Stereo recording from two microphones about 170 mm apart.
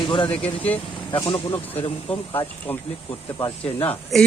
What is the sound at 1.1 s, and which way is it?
Speech, 25° left (ahead or behind).